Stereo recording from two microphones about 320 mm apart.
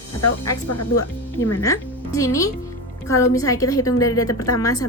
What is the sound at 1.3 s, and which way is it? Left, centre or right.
A woman's voice, centre.